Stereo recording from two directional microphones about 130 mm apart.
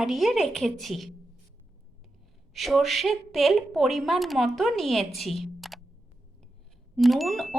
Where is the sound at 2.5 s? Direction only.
Centre (ahead or behind).